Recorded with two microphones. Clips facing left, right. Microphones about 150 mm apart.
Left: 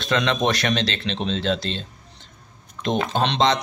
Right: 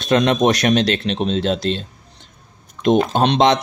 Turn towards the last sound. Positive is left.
turn(degrees=-55)  # may be behind; listen again after turning